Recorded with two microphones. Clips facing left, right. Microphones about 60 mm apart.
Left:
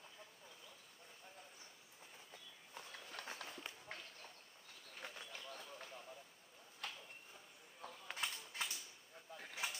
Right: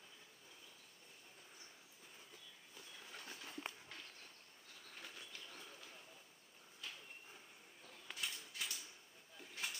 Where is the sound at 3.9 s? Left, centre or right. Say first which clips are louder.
Left 3 dB; left.